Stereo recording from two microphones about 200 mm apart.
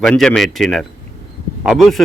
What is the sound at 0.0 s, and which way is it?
A man's voice, 5° left (ahead or behind).